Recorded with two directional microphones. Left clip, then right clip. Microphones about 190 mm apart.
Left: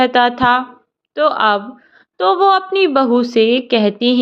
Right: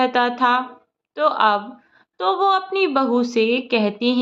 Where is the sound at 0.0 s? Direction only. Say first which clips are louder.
Left 5 dB; 25° left (ahead or behind).